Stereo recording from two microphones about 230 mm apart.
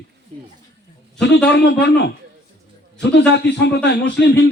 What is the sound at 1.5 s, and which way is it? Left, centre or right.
A man's voice, left.